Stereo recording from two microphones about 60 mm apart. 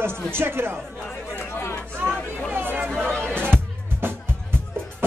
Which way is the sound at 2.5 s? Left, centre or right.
Right.